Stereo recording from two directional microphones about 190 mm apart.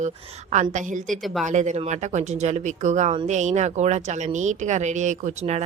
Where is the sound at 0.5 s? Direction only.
40° right (ahead or behind).